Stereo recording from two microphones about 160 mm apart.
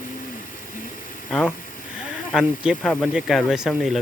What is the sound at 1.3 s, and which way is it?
Speech, 5° left (ahead or behind).